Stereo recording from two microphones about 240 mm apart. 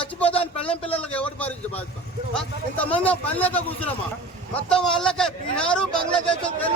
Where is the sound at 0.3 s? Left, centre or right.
Left.